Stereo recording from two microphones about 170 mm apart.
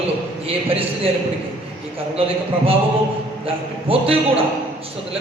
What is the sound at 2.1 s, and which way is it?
Speech, 35° right (ahead or behind).